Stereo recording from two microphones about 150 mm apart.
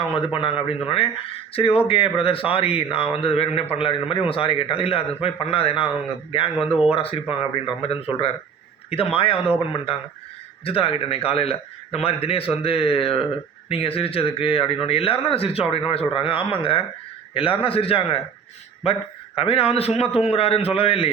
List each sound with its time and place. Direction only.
0.4 s a man's voice: 40° left (ahead or behind)
19.4 s a man's voice: 40° left (ahead or behind)